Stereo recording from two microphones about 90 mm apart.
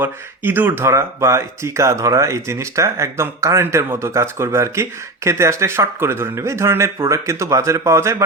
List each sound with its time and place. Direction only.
0.0 s speech: 25° right (ahead or behind)